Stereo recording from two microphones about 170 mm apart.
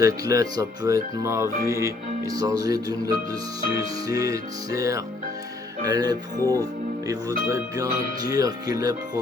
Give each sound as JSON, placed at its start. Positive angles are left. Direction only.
{"t": 0.0, "sound": "speech", "side_deg": -20}